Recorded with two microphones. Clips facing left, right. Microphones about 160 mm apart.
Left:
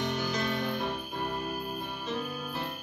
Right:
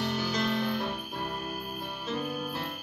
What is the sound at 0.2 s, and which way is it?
Music, 15° left (ahead or behind).